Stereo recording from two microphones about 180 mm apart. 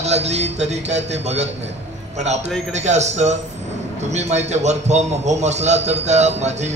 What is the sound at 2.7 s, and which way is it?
A man's voice, 40° right (ahead or behind).